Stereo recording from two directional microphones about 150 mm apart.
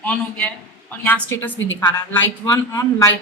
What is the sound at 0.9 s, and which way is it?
A woman's voice, 10° left (ahead or behind).